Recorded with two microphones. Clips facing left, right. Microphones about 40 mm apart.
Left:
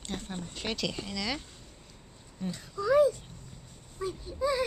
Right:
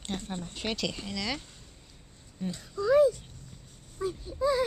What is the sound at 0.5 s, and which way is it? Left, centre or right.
Speech, centre.